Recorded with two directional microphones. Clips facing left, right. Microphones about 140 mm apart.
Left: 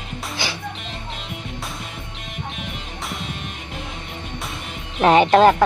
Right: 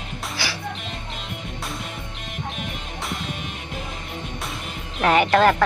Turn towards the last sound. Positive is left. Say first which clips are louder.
# left 4 dB
turn(degrees=25)  # may be behind; listen again after turning